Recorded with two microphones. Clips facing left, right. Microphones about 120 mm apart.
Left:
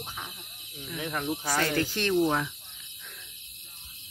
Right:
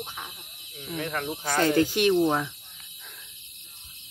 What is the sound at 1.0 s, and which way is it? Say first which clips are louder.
Speech: right 2 dB; 15° left (ahead or behind).